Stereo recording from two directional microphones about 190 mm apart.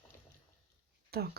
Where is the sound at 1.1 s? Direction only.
55° right (ahead or behind).